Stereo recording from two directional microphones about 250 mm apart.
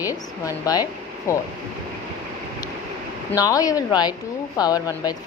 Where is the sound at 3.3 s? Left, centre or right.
Centre.